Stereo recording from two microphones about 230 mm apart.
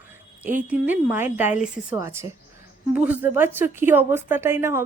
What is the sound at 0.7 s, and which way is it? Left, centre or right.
A woman's voice, centre.